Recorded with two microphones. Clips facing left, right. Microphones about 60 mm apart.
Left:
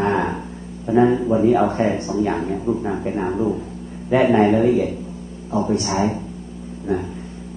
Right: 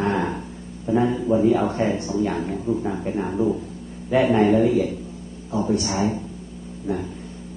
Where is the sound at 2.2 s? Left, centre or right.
Centre.